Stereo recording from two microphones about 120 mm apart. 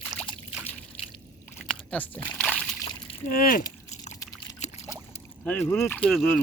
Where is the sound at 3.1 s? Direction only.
50° left (ahead or behind).